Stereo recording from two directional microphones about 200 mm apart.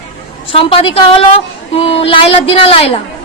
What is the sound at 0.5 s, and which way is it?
A woman's voice, 25° left (ahead or behind).